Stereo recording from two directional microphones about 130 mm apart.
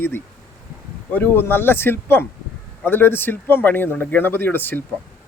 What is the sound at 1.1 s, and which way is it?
A man's voice, 15° left (ahead or behind).